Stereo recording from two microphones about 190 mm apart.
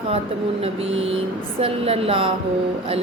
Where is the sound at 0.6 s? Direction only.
30° right (ahead or behind).